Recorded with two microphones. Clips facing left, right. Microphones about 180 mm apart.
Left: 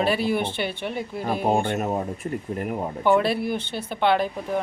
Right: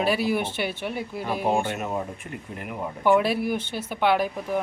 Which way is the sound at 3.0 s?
10° right (ahead or behind).